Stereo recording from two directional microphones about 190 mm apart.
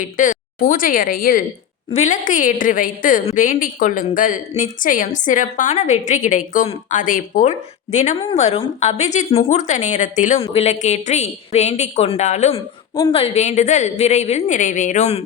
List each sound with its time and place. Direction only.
0.0 s a woman's voice: 40° left (ahead or behind)
1.9 s a woman's voice: 40° left (ahead or behind)